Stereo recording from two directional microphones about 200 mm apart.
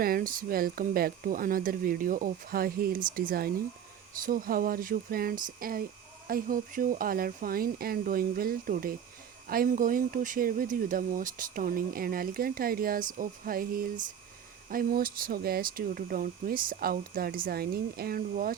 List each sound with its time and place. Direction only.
0.0 s speech: 45° right (ahead or behind)